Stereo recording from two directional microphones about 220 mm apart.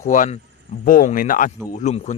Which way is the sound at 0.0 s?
35° left (ahead or behind).